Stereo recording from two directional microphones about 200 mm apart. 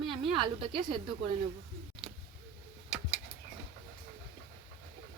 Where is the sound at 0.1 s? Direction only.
25° right (ahead or behind).